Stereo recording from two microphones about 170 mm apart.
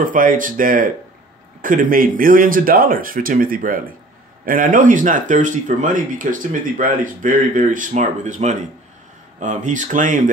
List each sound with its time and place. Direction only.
0.0 s speech: 50° right (ahead or behind)